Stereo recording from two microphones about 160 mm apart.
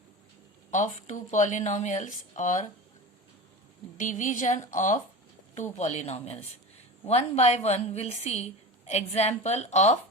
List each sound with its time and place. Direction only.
0.7 s a woman's voice: 50° left (ahead or behind)
3.9 s a woman's voice: 50° left (ahead or behind)